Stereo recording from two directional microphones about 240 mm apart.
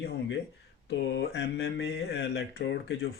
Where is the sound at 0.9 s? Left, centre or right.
Left.